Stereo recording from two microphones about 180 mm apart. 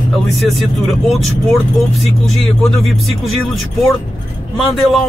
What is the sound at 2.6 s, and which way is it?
Music, centre (ahead or behind).